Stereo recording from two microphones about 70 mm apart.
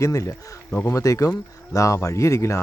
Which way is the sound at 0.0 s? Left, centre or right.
Left.